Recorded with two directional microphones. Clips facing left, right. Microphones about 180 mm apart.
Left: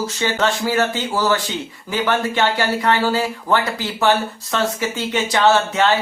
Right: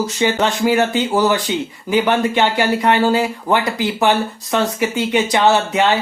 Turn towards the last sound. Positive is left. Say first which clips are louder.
# right 1 dB
turn(degrees=-15)  # may be behind; listen again after turning